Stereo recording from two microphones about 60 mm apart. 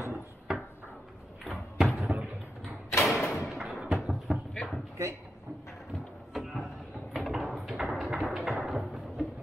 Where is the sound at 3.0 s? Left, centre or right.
Centre.